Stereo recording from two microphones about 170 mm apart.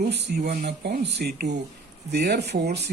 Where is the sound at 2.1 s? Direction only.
70° right (ahead or behind).